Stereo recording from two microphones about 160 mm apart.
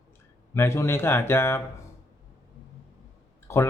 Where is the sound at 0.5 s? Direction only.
15° left (ahead or behind).